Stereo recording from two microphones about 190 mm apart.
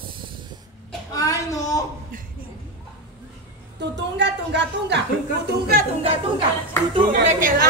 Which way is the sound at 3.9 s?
70° right (ahead or behind).